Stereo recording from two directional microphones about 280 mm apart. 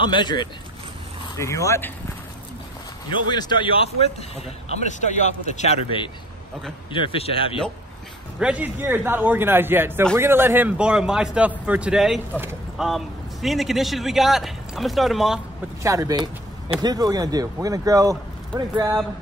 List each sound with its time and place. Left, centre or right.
0.0 s speech: centre
3.3 s speech: centre
8.4 s a man's voice: centre